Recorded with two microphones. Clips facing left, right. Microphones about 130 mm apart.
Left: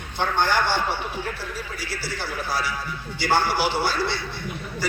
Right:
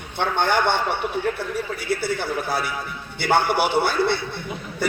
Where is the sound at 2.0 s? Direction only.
55° right (ahead or behind).